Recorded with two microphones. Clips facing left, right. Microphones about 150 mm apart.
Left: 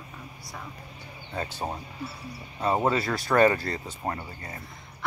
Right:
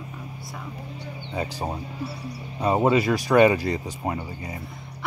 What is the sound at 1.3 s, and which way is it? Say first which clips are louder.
Speech: right 3 dB; 10° right (ahead or behind).